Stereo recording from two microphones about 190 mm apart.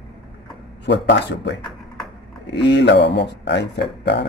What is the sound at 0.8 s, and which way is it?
A man's voice, 65° left (ahead or behind).